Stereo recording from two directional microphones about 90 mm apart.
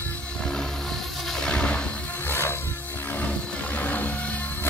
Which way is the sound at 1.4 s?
10° left (ahead or behind).